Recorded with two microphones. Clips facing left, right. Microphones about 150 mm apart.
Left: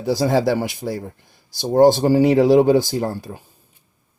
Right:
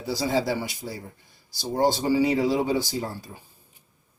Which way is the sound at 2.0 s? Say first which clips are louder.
Left 7 dB; 50° left (ahead or behind).